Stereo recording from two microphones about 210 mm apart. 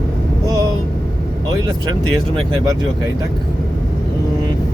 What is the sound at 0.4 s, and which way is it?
Vehicle, 15° right (ahead or behind).